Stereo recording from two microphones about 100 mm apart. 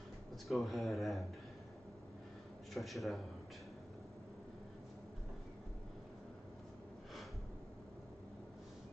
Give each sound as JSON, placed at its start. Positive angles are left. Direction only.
{"t": 0.5, "sound": "speech", "side_deg": 0}
{"t": 2.7, "sound": "speech", "side_deg": 0}